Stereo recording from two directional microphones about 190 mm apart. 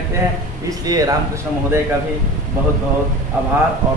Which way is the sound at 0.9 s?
20° right (ahead or behind).